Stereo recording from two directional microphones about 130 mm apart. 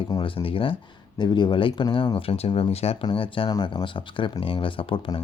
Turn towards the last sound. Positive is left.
turn(degrees=40)  # may be behind; listen again after turning